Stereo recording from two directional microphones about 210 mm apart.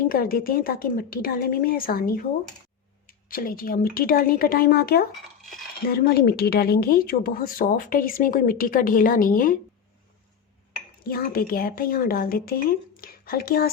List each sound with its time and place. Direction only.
0.0 s speech: 45° left (ahead or behind)
11.0 s speech: 45° left (ahead or behind)